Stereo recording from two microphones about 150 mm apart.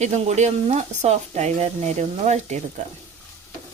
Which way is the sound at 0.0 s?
50° right (ahead or behind).